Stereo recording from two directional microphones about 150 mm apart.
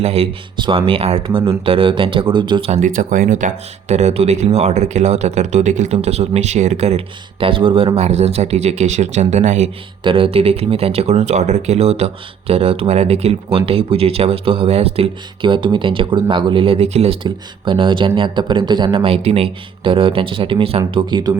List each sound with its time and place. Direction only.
0.0 s speech: 40° right (ahead or behind)
2.8 s speech: 60° right (ahead or behind)
10.0 s speech: 35° right (ahead or behind)